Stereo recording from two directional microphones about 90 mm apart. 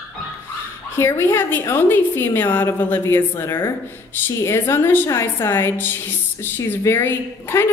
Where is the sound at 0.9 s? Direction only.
25° left (ahead or behind).